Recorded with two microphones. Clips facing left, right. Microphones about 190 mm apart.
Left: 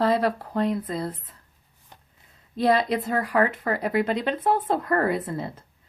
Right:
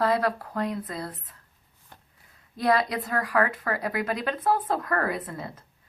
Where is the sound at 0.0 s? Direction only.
25° left (ahead or behind).